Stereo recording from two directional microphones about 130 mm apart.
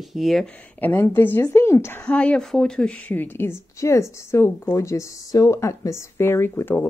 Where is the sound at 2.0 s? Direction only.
10° left (ahead or behind).